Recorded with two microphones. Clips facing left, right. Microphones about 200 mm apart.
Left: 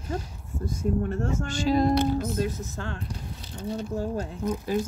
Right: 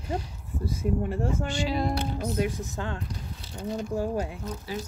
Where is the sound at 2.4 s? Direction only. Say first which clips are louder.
Even; 15° right (ahead or behind).